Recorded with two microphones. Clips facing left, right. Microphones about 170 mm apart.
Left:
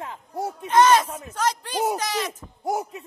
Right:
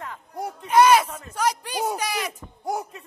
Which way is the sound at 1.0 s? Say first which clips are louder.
Left 2 dB; 10° left (ahead or behind).